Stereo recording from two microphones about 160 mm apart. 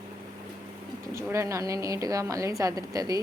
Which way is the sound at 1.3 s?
20° right (ahead or behind).